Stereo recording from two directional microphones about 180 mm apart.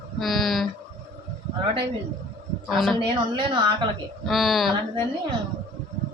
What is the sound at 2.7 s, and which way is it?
Speech, centre (ahead or behind).